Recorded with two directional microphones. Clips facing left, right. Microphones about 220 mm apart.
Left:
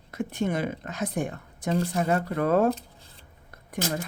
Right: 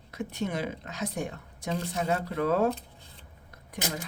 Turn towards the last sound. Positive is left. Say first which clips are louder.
# left 5 dB
turn(degrees=50)  # may be behind; listen again after turning